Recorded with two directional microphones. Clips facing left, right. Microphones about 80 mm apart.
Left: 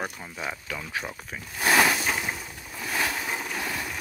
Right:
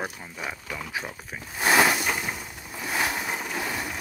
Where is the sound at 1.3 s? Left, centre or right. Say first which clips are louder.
Right 1 dB; centre.